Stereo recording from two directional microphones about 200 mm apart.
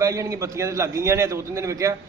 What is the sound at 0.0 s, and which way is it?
A man's voice, 15° right (ahead or behind).